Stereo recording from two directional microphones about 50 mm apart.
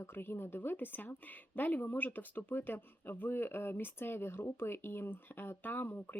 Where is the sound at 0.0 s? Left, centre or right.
Left.